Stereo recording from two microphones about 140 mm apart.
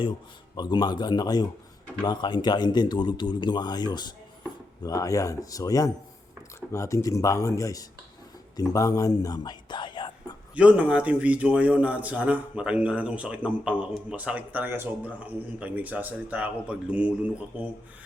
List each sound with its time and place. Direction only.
0.5 s speech: 30° left (ahead or behind)
10.5 s a man's voice: 10° right (ahead or behind)